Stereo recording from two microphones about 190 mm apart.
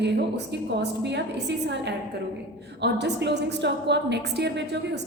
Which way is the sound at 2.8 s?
65° right (ahead or behind).